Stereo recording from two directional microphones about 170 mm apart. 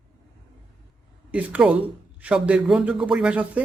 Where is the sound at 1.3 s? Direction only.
5° right (ahead or behind).